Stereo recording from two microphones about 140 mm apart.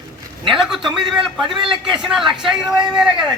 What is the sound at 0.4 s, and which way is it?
A man's voice, centre (ahead or behind).